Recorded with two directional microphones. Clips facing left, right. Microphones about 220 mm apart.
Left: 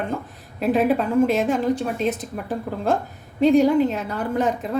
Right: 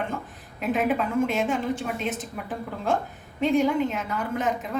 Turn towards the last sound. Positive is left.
turn(degrees=35)  # may be behind; listen again after turning